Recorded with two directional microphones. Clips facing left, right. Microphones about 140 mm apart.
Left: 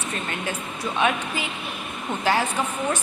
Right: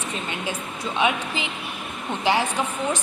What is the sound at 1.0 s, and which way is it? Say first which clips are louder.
Speech: even; 15° right (ahead or behind).